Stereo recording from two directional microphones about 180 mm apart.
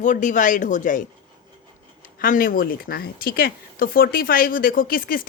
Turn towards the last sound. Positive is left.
turn(degrees=55)  # may be behind; listen again after turning